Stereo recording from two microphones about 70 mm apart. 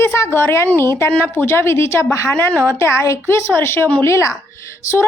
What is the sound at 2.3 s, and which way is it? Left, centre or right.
Speech, left.